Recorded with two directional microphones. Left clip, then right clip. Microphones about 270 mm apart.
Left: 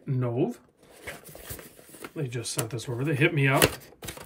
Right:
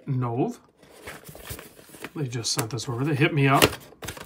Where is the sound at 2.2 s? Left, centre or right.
Centre.